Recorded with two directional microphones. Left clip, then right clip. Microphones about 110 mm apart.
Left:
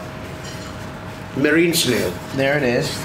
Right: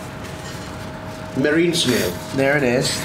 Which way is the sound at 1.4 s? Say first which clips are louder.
Left 2 dB; 10° left (ahead or behind).